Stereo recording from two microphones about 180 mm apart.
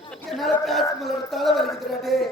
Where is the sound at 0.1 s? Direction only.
Centre (ahead or behind).